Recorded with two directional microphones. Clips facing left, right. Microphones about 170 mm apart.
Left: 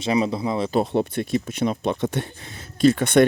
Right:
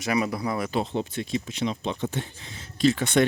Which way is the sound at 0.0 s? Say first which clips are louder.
Left 4 dB; 25° left (ahead or behind).